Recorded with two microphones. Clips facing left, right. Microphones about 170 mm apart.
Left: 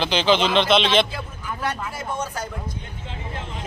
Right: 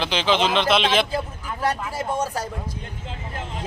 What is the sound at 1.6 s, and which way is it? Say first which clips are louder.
Speech: right 4 dB; 35° right (ahead or behind).